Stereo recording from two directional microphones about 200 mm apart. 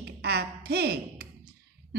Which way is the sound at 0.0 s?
55° right (ahead or behind).